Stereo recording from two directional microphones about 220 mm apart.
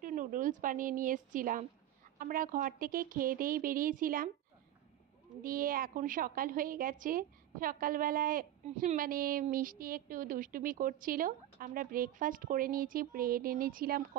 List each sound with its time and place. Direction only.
0.0 s a woman's voice: 35° right (ahead or behind)
5.4 s a woman's voice: 40° right (ahead or behind)